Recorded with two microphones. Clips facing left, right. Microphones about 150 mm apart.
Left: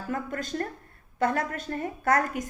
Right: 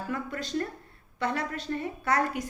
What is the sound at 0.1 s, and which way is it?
A woman's voice, 50° left (ahead or behind).